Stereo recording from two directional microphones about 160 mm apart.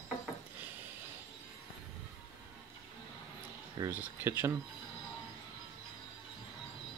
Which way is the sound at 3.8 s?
15° right (ahead or behind).